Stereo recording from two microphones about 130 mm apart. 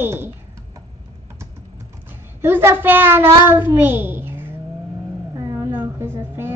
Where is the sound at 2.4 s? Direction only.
20° right (ahead or behind).